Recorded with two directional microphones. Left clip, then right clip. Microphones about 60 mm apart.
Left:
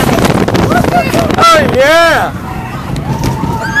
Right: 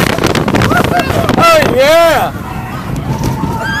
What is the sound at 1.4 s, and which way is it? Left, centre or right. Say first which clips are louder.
Boat: left 1 dB; right.